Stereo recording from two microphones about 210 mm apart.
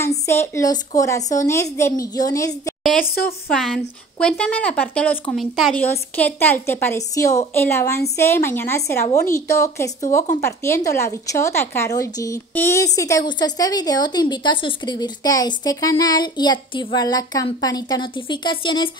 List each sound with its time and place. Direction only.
0.0 s speech: 15° left (ahead or behind)
3.4 s speech: centre (ahead or behind); by 18.9 s 25° left (ahead or behind)